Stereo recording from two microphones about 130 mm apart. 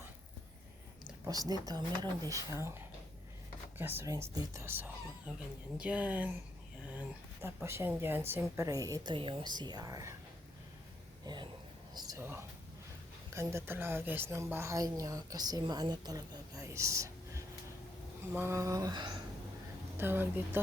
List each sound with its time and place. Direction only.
1.3 s a woman's voice: 30° right (ahead or behind); by 6.3 s 10° right (ahead or behind)
7.4 s a woman's voice: 20° right (ahead or behind)
9.1 s speech: 40° right (ahead or behind); by 10.2 s 25° right (ahead or behind)
11.9 s a sound: 30° right (ahead or behind)
12.2 s a woman's voice: 20° right (ahead or behind); by 19.1 s 35° right (ahead or behind)
20.0 s speech: 15° right (ahead or behind)